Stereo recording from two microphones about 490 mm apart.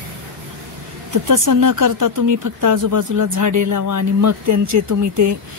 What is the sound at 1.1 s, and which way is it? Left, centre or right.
A woman's voice, right.